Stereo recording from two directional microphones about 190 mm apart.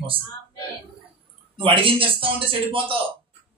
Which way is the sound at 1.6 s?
30° right (ahead or behind).